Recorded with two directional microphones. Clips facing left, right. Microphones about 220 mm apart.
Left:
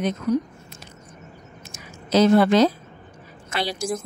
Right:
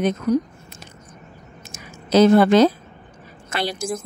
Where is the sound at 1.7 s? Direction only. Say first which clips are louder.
Right 3 dB; 55° right (ahead or behind).